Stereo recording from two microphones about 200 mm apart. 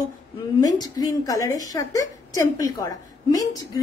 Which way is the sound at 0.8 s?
20° left (ahead or behind).